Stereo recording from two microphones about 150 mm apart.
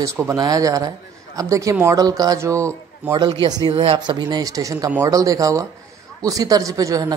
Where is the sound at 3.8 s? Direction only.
40° right (ahead or behind).